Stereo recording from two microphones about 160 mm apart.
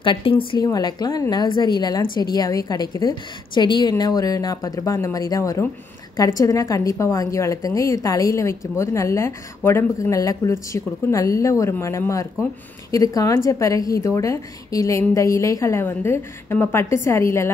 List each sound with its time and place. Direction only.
0.0 s a woman's voice: 30° left (ahead or behind); by 17.5 s 15° left (ahead or behind)